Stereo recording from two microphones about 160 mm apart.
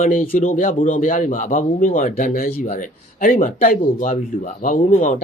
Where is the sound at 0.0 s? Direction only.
55° left (ahead or behind).